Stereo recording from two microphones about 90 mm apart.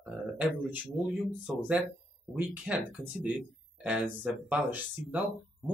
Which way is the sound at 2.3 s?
15° right (ahead or behind).